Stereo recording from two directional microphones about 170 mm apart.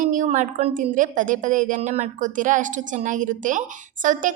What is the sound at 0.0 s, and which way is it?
A woman's voice, 50° right (ahead or behind).